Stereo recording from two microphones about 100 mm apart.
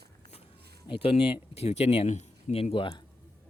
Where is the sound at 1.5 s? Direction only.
90° left.